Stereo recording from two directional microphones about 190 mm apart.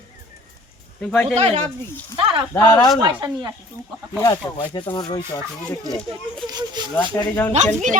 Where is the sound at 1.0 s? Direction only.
5° left (ahead or behind).